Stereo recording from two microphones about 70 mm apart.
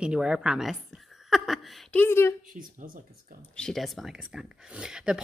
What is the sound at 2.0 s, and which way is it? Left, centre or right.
Speech, left.